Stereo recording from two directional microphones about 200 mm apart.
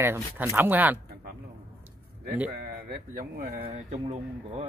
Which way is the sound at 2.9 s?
45° right (ahead or behind).